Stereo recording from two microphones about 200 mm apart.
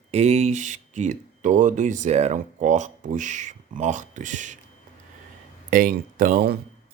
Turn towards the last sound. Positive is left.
turn(degrees=-50)  # may be behind; listen again after turning